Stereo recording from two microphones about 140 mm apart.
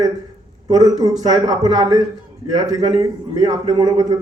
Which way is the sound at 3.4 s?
30° right (ahead or behind).